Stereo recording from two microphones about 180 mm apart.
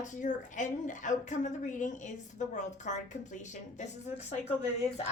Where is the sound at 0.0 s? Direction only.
45° left (ahead or behind).